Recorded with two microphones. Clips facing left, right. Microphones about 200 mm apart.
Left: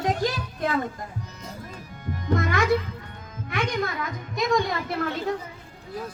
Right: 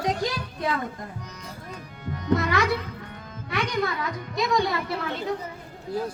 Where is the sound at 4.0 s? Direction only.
50° left (ahead or behind).